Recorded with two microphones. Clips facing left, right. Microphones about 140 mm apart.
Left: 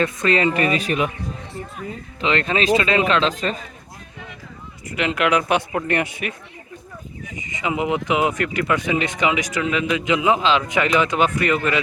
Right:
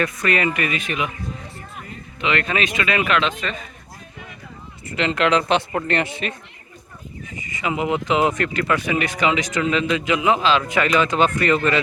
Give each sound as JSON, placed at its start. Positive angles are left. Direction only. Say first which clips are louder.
{"t": 0.0, "sound": "a man's voice", "louder": "left 2 dB", "side_deg": 25}
{"t": 2.2, "sound": "a man's voice", "louder": "left 2 dB", "side_deg": 30}
{"t": 4.9, "sound": "speech", "louder": "right 1 dB", "side_deg": 10}